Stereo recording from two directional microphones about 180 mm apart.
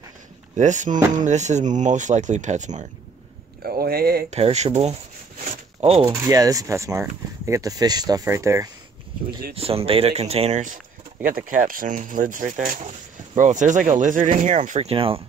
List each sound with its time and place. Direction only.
0.6 s speech: 40° right (ahead or behind)
3.6 s speech: 55° right (ahead or behind)
4.3 s speech: 40° right (ahead or behind)
6.0 s speech: 20° right (ahead or behind)
9.6 s speech: 30° right (ahead or behind)